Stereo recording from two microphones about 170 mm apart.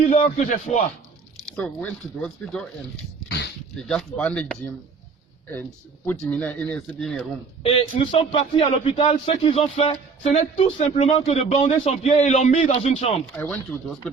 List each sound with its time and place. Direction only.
0.0 s a man's voice: 40° left (ahead or behind)
1.5 s speech: 5° left (ahead or behind)
3.2 s a sound: 80° left
3.8 s speech: 5° left (ahead or behind)
6.1 s speech: 10° left (ahead or behind)
7.6 s a man's voice: 35° left (ahead or behind)
13.3 s speech: 10° left (ahead or behind)